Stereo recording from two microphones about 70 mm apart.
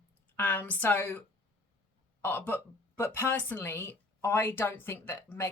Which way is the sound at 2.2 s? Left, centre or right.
Left.